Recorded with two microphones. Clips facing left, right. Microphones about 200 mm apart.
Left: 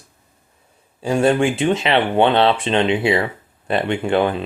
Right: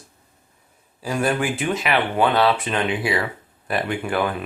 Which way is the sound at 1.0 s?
25° left (ahead or behind).